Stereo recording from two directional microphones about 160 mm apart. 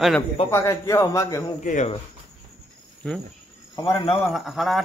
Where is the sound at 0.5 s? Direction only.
15° left (ahead or behind).